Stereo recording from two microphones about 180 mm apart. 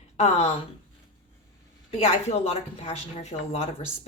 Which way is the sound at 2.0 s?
35° left (ahead or behind).